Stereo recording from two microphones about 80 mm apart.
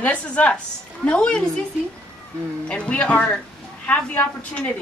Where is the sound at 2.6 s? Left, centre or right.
Centre.